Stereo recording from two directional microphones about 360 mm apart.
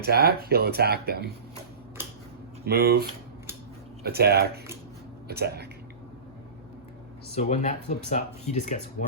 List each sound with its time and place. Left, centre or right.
0.0 s speech: right
2.6 s speech: right
7.3 s speech: centre